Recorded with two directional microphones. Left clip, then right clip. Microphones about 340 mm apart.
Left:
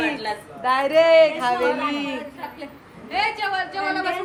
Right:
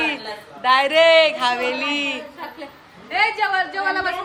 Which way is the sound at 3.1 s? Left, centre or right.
Right.